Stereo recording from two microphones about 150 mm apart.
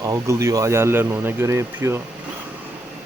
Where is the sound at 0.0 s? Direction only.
20° right (ahead or behind).